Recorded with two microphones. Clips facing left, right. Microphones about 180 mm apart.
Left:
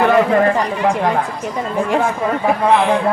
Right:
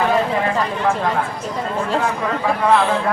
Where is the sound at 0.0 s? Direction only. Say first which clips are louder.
Left 5 dB; 60° left (ahead or behind).